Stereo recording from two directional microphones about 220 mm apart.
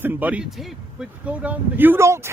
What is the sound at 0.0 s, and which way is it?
Speech, 10° right (ahead or behind).